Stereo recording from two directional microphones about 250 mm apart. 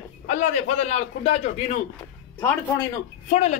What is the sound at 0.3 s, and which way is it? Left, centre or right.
A man's voice, left.